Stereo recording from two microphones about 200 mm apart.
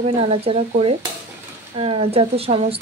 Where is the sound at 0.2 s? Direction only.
30° right (ahead or behind).